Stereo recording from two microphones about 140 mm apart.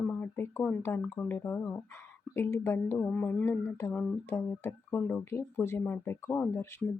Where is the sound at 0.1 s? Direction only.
15° left (ahead or behind).